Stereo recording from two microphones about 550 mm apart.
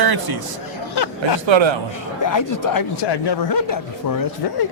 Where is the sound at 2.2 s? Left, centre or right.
Left.